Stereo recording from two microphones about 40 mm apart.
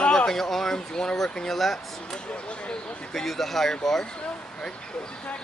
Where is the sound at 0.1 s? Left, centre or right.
Centre.